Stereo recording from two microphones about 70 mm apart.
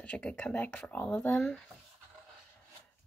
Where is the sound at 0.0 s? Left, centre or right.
Left.